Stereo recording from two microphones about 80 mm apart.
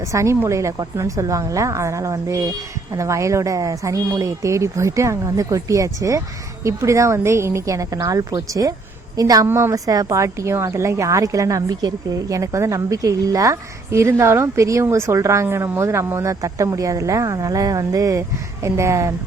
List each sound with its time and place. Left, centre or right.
0.1 s a woman's voice: right
9.5 s a woman's voice: right
9.7 s a woman's voice: right